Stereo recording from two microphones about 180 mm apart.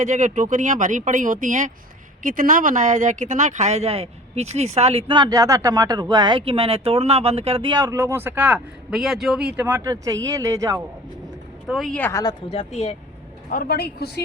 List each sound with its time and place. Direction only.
0.0 s speech: 40° right (ahead or behind); by 10.8 s 20° right (ahead or behind)
11.6 s speech: centre (ahead or behind)
12.2 s speech: 35° left (ahead or behind)
13.5 s speech: 55° left (ahead or behind)